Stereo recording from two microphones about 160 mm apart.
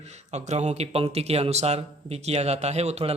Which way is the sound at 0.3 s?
45° right (ahead or behind).